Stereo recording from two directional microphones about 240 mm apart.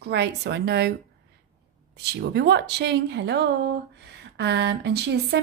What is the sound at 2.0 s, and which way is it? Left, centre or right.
A woman's voice, right.